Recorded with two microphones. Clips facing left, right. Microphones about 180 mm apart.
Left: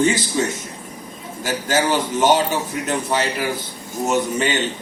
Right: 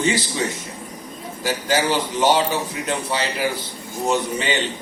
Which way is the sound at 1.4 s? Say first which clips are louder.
Left 1 dB; 45° left (ahead or behind).